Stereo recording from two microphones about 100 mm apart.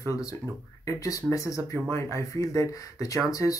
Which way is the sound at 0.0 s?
35° left (ahead or behind).